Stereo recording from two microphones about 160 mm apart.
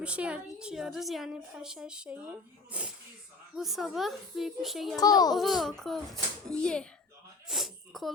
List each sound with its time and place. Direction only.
0.0 s a woman's voice: 5° right (ahead or behind)
4.9 s a child's voice: 25° left (ahead or behind)
5.4 s a woman's voice: centre (ahead or behind)
7.4 s sneeze: centre (ahead or behind)